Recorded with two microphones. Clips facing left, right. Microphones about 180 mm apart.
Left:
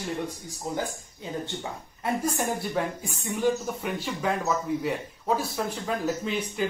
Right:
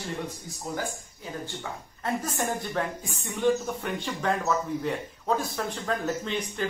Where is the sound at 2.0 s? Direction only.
10° left (ahead or behind).